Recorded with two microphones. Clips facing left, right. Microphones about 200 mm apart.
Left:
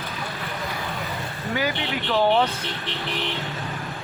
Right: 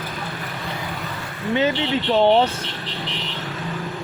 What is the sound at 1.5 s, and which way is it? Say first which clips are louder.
Speech: right 6 dB; 25° right (ahead or behind).